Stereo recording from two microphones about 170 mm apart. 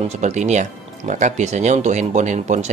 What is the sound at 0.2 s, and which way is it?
Speech, 45° right (ahead or behind).